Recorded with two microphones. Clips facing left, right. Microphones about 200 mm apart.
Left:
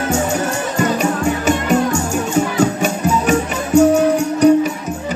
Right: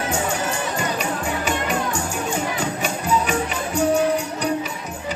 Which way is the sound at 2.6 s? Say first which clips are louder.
Left 9 dB; 45° left (ahead or behind).